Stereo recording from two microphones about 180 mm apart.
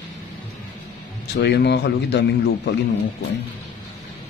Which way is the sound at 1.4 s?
70° left (ahead or behind).